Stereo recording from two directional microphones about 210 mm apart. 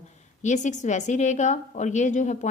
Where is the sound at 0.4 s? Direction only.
35° left (ahead or behind).